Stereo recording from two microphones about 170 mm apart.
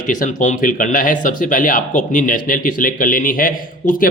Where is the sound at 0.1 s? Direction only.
50° left (ahead or behind).